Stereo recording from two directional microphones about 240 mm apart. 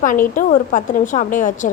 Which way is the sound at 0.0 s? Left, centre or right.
Left.